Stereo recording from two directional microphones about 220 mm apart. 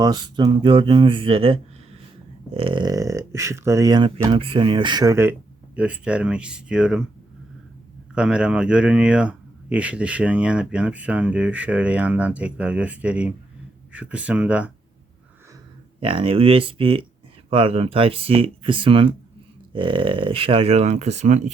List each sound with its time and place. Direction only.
0.0 s speech: 20° right (ahead or behind); by 7.0 s 5° right (ahead or behind)
8.1 s speech: 5° right (ahead or behind)
16.0 s speech: 25° right (ahead or behind)